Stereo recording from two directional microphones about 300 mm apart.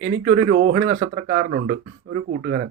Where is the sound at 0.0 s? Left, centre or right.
Right.